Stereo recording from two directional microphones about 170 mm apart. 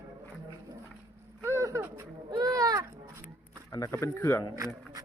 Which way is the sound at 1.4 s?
15° right (ahead or behind).